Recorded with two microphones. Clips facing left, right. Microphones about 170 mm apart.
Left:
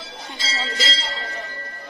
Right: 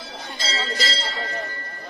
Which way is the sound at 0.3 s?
20° left (ahead or behind).